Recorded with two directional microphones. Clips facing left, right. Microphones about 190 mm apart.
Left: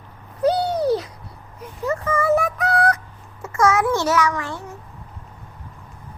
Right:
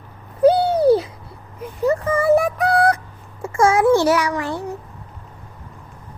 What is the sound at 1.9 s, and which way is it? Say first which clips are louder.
Synthetic singing: right 3 dB; 35° right (ahead or behind).